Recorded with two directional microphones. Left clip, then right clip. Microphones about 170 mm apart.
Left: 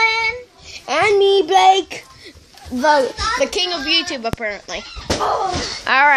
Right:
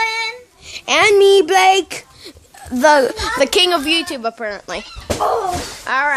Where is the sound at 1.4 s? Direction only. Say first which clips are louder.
Even; 10° right (ahead or behind).